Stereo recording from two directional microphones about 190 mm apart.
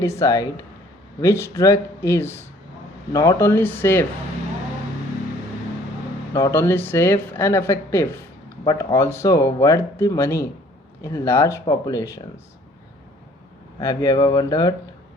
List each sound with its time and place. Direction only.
0.0 s speech: 15° left (ahead or behind)
6.3 s speech: 15° left (ahead or behind)
13.7 s speech: 20° left (ahead or behind)